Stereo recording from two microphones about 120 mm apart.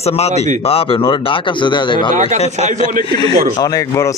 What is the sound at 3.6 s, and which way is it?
Speech, 30° left (ahead or behind).